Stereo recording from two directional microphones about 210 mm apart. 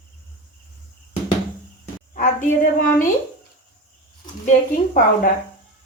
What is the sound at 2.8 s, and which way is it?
Speech, 40° left (ahead or behind).